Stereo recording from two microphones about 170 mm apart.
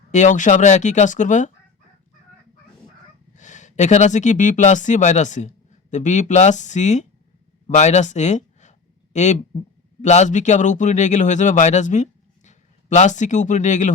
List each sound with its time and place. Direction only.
0.1 s a man's voice: 45° left (ahead or behind)
3.3 s a man's voice: 45° left (ahead or behind)